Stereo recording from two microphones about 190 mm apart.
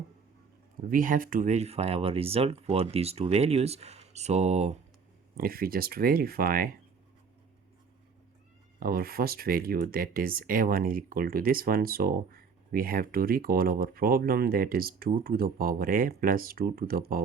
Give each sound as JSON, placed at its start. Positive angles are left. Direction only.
{"t": 0.9, "sound": "speech", "side_deg": -45}
{"t": 5.4, "sound": "speech", "side_deg": -50}
{"t": 8.8, "sound": "speech", "side_deg": -50}